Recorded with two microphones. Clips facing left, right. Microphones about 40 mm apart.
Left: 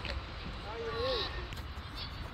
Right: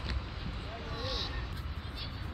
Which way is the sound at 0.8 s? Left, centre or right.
Centre.